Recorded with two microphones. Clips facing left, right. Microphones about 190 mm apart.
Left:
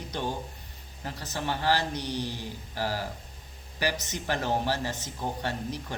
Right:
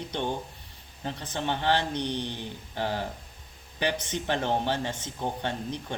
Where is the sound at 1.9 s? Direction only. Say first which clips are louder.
Right 2 dB; 10° left (ahead or behind).